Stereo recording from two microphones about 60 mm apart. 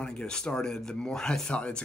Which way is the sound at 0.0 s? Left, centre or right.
Centre.